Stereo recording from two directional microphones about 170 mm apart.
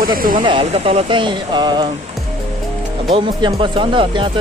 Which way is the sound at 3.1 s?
30° right (ahead or behind).